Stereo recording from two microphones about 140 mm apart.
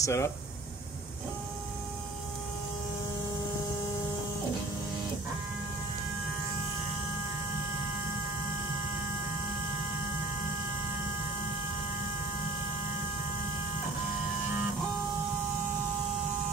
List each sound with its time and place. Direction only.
0.0 s speech: 20° left (ahead or behind)